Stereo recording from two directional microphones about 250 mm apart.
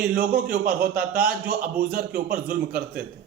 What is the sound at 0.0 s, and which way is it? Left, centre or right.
A man's voice, right.